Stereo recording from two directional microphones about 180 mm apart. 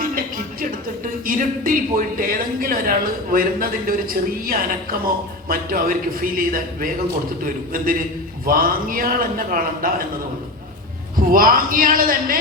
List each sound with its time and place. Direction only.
0.0 s music: 50° right (ahead or behind)
1.2 s a man's voice: 50° right (ahead or behind)
11.3 s a man's voice: 50° right (ahead or behind)